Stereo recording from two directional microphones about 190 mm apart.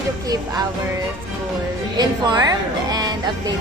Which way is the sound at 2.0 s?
20° right (ahead or behind).